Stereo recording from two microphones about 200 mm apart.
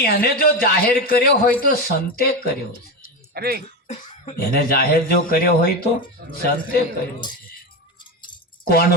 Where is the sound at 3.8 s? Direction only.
40° left (ahead or behind).